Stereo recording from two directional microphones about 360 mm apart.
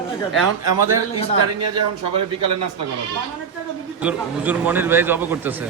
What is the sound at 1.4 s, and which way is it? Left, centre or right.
Speech, right.